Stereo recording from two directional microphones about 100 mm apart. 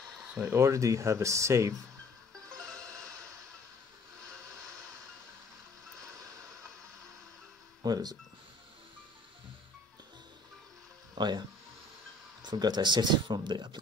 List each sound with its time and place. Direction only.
0.4 s speech: 30° right (ahead or behind)
2.7 s music: 35° right (ahead or behind)
7.8 s speech: 40° right (ahead or behind)
11.1 s speech: 45° right (ahead or behind)